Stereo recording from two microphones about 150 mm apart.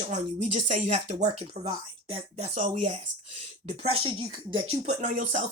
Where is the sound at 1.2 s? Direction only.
35° right (ahead or behind).